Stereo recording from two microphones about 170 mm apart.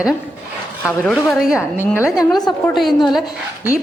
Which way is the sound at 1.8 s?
15° left (ahead or behind).